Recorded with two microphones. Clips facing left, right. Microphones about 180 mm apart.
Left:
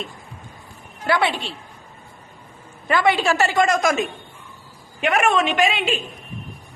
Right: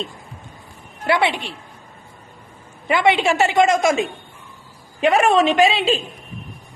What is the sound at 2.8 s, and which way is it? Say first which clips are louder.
A woman's voice: right 2 dB; 20° right (ahead or behind).